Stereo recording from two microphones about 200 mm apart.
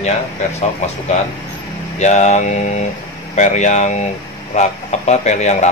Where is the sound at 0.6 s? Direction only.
35° left (ahead or behind).